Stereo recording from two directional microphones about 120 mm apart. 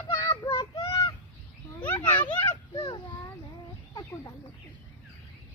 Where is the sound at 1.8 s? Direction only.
15° left (ahead or behind).